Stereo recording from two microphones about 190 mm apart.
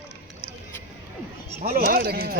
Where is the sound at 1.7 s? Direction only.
50° right (ahead or behind).